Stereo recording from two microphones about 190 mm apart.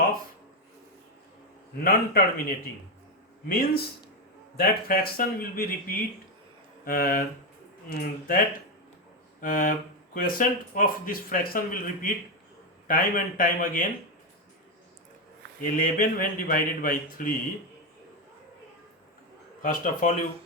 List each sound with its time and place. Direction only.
1.8 s speech: 50° left (ahead or behind)
3.5 s speech: 50° left (ahead or behind)
9.4 s speech: 45° left (ahead or behind)
15.8 s speech: 45° left (ahead or behind)
19.6 s speech: 45° left (ahead or behind)